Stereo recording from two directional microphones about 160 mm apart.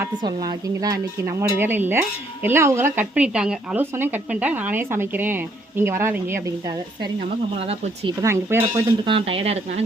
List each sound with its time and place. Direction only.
0.2 s speech: 25° right (ahead or behind)
7.6 s speech: 35° right (ahead or behind)
8.2 s speech: 15° right (ahead or behind)
9.0 s speech: 35° right (ahead or behind)